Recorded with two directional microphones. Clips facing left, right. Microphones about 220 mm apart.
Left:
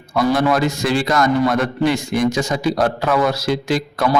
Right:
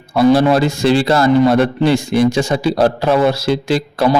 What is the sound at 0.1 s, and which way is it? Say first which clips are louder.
A man's voice: right 6 dB; 30° right (ahead or behind).